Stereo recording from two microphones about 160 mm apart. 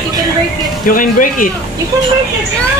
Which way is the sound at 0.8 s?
60° left (ahead or behind).